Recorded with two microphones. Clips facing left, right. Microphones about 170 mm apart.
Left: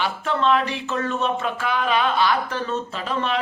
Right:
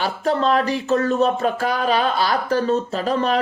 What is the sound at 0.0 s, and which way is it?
Speech, 40° right (ahead or behind).